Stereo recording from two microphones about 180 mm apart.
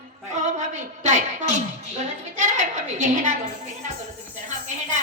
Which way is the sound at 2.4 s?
40° right (ahead or behind).